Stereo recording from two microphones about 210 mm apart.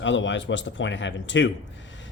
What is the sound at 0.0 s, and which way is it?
Speech, 60° left (ahead or behind).